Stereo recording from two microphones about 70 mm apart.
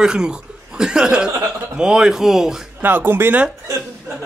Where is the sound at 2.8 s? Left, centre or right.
Right.